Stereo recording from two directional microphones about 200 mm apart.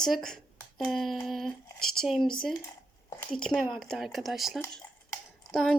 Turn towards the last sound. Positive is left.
turn(degrees=0)  # may be behind; listen again after turning